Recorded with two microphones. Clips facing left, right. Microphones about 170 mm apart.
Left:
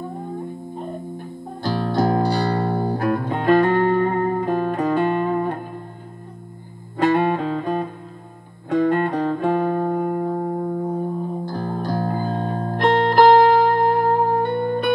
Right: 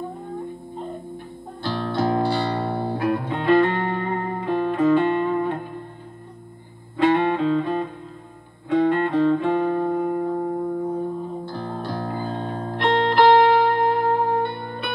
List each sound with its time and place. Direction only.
1.1 s music: 40° left (ahead or behind)
7.0 s music: 45° left (ahead or behind)